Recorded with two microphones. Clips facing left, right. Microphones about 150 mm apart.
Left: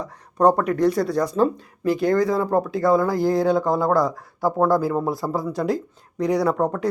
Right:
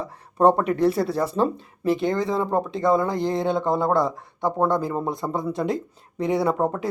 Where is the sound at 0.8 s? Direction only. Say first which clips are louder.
Left 1 dB; 30° right (ahead or behind).